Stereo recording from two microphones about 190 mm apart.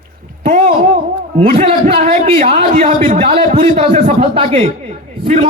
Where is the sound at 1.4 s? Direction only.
30° right (ahead or behind).